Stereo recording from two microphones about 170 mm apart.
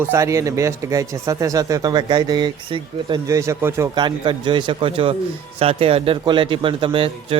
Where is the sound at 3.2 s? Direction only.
20° right (ahead or behind).